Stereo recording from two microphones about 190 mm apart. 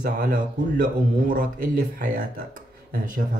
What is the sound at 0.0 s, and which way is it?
Speech, 45° right (ahead or behind).